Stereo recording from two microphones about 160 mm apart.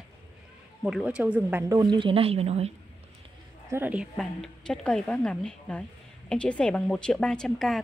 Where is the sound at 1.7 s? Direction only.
25° right (ahead or behind).